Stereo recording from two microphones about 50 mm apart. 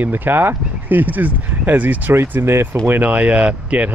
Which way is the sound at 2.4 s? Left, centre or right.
Right.